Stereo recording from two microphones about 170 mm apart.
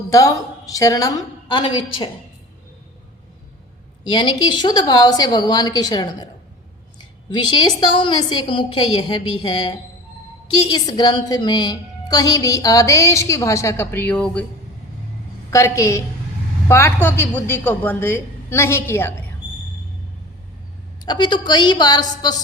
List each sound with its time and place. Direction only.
0.1 s a woman's voice: 20° left (ahead or behind)
4.0 s a woman's voice: 25° left (ahead or behind); by 14.4 s 10° left (ahead or behind)
15.4 s a woman's voice: 15° left (ahead or behind)
21.0 s a woman's voice: 25° left (ahead or behind)